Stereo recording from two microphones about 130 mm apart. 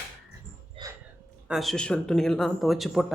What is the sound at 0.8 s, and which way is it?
Dog, 45° right (ahead or behind).